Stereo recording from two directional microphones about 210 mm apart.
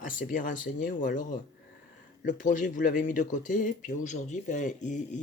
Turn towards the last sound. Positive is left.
turn(degrees=35)  # may be behind; listen again after turning